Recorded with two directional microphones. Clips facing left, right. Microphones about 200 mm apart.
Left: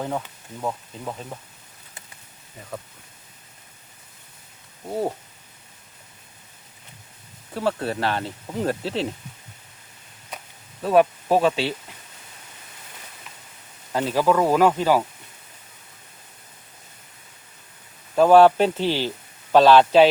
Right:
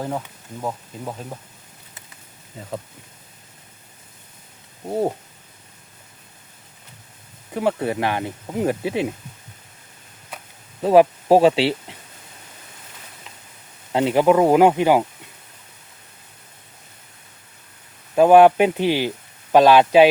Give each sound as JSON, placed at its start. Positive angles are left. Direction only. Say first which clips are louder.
{"t": 0.0, "sound": "speech", "louder": "right 1 dB", "side_deg": -5}
{"t": 4.9, "sound": "speech", "louder": "right 4 dB", "side_deg": -20}
{"t": 7.5, "sound": "speech", "louder": "right 3 dB", "side_deg": -15}
{"t": 10.8, "sound": "speech", "louder": "right 4 dB", "side_deg": -30}
{"t": 13.9, "sound": "speech", "louder": "right 4 dB", "side_deg": -20}
{"t": 18.1, "sound": "speech", "louder": "right 2 dB", "side_deg": -15}